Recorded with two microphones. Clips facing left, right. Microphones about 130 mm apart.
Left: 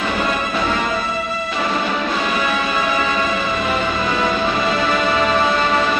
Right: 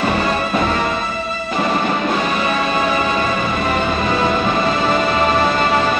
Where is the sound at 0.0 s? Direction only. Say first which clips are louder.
Right 3 dB; 40° right (ahead or behind).